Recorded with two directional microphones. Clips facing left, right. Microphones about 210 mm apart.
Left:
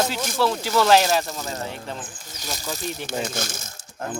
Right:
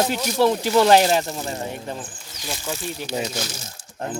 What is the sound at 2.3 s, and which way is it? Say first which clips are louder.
Speech: right 2 dB; 40° left (ahead or behind).